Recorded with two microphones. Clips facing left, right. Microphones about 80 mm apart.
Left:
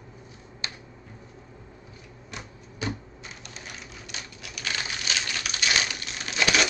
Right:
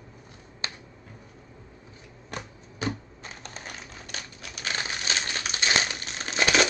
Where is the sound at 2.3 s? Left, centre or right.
Right.